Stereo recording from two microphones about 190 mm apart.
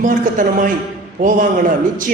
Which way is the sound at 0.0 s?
45° right (ahead or behind).